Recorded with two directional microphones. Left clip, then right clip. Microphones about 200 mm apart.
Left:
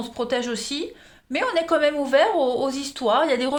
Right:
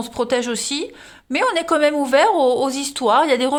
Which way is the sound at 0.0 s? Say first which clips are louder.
Right 5 dB; 45° right (ahead or behind).